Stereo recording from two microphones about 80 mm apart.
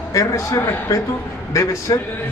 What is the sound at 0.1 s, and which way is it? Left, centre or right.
A man's voice, left.